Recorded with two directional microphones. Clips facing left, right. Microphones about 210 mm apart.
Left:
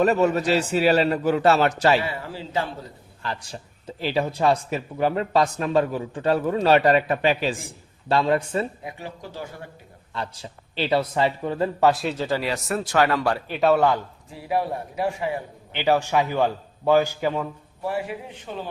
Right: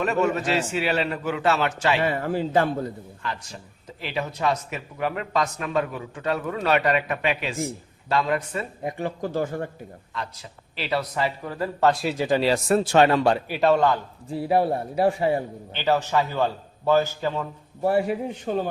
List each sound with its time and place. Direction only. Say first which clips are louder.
0.0 s speech: left 4 dB; 35° left (ahead or behind)
2.0 s speech: right 7 dB; 50° right (ahead or behind)
3.2 s speech: left 2 dB; 30° left (ahead or behind)
8.8 s speech: right 8 dB; 50° right (ahead or behind)
10.2 s speech: left 3 dB; 30° left (ahead or behind)
11.8 s a man's voice: even; 5° left (ahead or behind)
12.1 s speech: right 3 dB; 15° right (ahead or behind)
12.4 s speech: right 6 dB; 30° right (ahead or behind)
13.5 s a man's voice: left 4 dB; centre (ahead or behind)
14.3 s a man's voice: right 5 dB; 35° right (ahead or behind)
15.7 s a man's voice: left 2 dB; 15° left (ahead or behind)
17.8 s speech: right 6 dB; 40° right (ahead or behind)